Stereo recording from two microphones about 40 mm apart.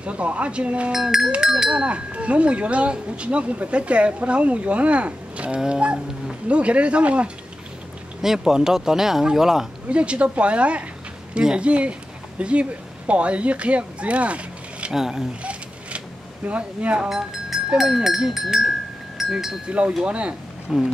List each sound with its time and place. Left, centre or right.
0.0 s speech: right
0.9 s speech: centre
1.7 s speech: right
8.2 s speech: centre
9.8 s speech: right
14.9 s speech: centre
16.4 s speech: right
16.9 s speech: right
20.1 s speech: right
20.7 s speech: centre